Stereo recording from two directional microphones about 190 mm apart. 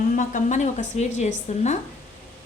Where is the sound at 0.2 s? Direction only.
40° left (ahead or behind).